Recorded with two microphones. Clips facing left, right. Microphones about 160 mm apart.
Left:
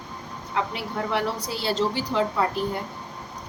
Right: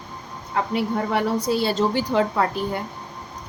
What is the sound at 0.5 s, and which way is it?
A woman's voice, 50° right (ahead or behind).